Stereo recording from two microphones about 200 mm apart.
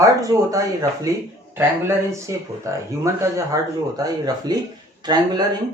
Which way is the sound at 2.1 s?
15° right (ahead or behind).